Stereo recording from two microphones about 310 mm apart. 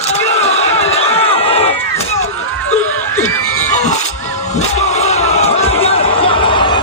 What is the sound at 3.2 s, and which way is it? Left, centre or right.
Crowd, left.